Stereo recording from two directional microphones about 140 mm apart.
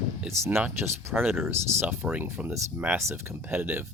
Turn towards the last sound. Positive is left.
turn(degrees=-15)  # may be behind; listen again after turning